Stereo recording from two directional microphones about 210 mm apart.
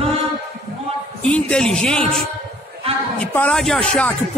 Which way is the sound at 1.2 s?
5° left (ahead or behind).